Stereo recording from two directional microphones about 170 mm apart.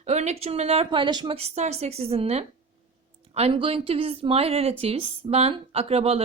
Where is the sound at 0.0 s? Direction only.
40° right (ahead or behind).